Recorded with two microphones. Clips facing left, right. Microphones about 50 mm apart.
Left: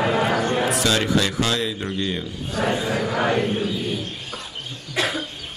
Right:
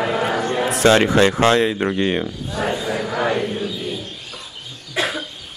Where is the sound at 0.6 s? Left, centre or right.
Right.